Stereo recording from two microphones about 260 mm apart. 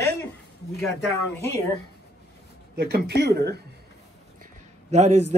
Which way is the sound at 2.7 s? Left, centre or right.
Right.